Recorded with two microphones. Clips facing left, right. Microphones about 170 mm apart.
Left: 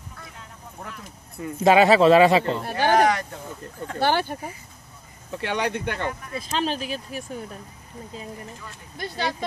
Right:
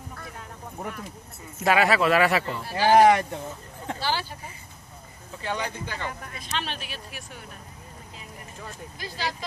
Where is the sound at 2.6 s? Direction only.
55° left (ahead or behind).